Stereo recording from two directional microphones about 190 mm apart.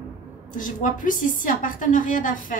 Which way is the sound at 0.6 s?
45° left (ahead or behind).